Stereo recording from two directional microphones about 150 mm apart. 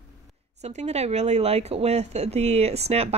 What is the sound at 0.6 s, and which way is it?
Speech, 45° right (ahead or behind).